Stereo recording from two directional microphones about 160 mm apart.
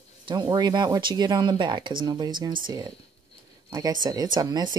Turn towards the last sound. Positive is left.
turn(degrees=-25)  # may be behind; listen again after turning